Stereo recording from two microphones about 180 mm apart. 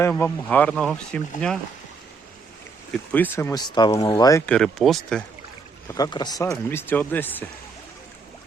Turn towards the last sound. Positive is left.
turn(degrees=10)  # may be behind; listen again after turning